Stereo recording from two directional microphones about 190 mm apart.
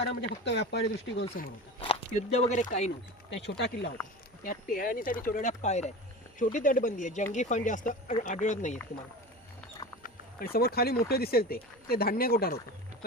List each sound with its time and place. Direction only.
0.0 s speech: 65° left (ahead or behind)
1.8 s a sound: 30° left (ahead or behind)
2.5 s speech: 40° left (ahead or behind)
3.2 s speech: 70° left (ahead or behind)
4.4 s speech: 50° left (ahead or behind)
10.0 s speech: 50° left (ahead or behind)